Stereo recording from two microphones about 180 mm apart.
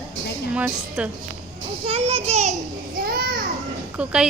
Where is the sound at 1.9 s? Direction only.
35° right (ahead or behind).